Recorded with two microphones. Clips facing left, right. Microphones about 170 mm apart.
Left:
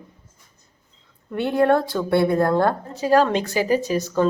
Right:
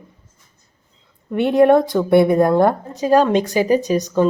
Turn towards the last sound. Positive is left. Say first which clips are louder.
# right 4 dB
turn(degrees=-15)  # may be behind; listen again after turning